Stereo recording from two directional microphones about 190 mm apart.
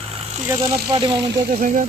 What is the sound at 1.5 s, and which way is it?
Speech, 50° right (ahead or behind).